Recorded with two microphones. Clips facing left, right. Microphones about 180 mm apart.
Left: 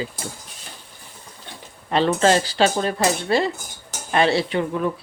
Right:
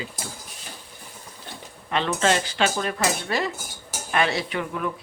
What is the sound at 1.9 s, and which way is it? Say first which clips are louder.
Speech: left 5 dB; 35° left (ahead or behind).